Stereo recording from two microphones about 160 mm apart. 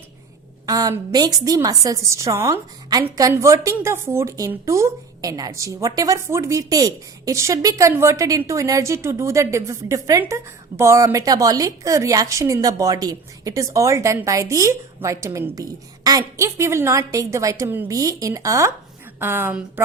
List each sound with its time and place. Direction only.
0.6 s a woman's voice: 20° right (ahead or behind)